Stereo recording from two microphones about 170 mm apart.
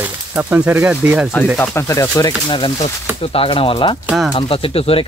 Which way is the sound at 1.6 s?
15° left (ahead or behind).